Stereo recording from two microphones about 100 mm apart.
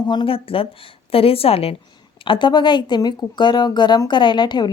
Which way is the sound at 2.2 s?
55° left (ahead or behind).